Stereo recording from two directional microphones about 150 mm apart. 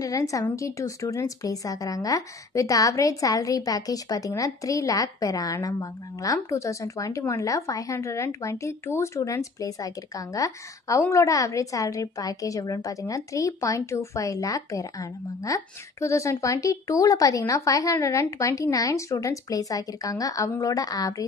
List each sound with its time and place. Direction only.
0.0 s speech: 20° left (ahead or behind)